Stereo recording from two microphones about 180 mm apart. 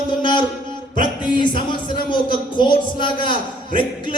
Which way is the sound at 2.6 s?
25° left (ahead or behind).